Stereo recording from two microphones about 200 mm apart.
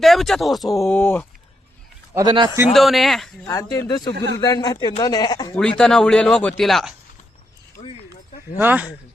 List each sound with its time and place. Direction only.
0.0 s speech: centre (ahead or behind)
2.1 s a man's voice: 20° right (ahead or behind)
2.7 s speech: centre (ahead or behind)
3.4 s speech: 15° left (ahead or behind)
5.5 s speech: 5° left (ahead or behind)
7.8 s a sound: 30° left (ahead or behind)
8.5 s speech: 10° right (ahead or behind)